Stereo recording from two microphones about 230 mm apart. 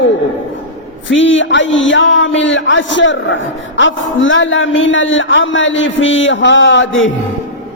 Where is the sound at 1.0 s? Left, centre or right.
Left.